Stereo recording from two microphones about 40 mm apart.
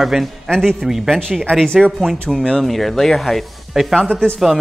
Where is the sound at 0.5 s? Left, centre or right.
Centre.